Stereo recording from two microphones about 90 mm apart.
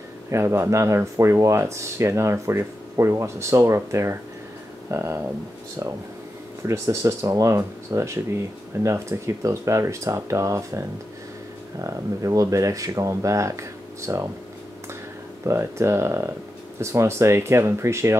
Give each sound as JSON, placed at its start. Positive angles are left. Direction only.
{"t": 0.3, "sound": "speech", "side_deg": -30}
{"t": 6.6, "sound": "speech", "side_deg": -35}
{"t": 15.4, "sound": "speech", "side_deg": -30}